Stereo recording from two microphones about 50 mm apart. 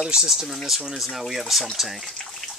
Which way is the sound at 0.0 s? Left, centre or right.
Centre.